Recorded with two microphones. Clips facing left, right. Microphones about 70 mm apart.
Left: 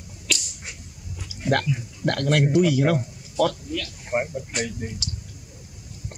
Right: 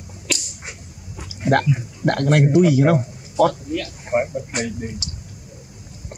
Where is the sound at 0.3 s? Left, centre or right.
Centre.